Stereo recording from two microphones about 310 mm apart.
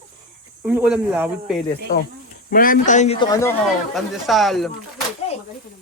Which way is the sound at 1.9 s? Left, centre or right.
Left.